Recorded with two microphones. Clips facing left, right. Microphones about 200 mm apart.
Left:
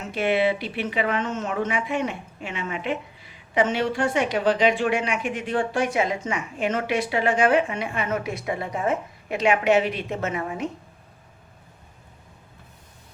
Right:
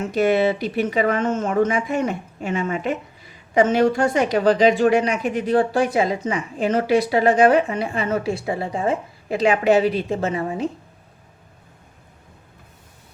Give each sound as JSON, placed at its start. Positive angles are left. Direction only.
{"t": 0.1, "sound": "a woman's voice", "side_deg": -40}